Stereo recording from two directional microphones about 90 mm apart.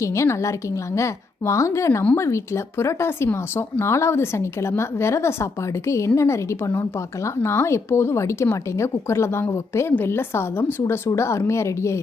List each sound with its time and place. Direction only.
0.0 s a woman's voice: 35° left (ahead or behind)